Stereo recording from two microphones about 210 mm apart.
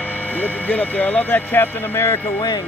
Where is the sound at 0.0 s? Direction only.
5° left (ahead or behind).